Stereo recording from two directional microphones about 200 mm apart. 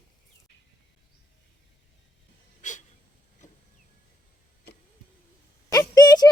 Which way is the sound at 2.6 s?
40° left (ahead or behind).